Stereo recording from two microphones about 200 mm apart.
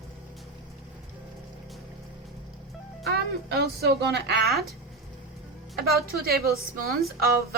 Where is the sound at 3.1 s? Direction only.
55° right (ahead or behind).